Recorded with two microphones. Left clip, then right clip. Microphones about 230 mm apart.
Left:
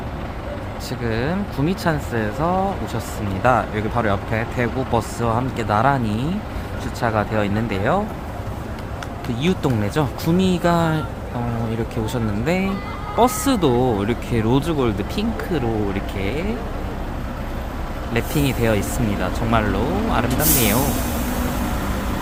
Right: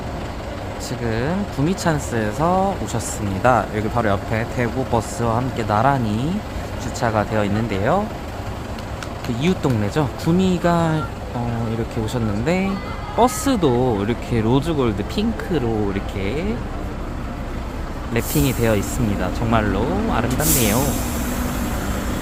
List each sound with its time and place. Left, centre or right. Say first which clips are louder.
1.0 s speech: even; centre
9.4 s speech: even; centre
12.1 s speech: right 1 dB; centre
18.1 s speech: right 1 dB; centre